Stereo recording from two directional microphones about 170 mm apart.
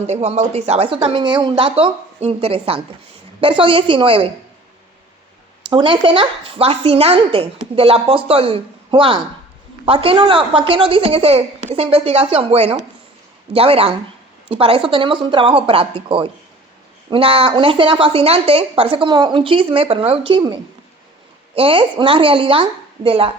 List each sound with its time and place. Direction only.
0.1 s speech: 40° right (ahead or behind)
5.7 s speech: 30° right (ahead or behind)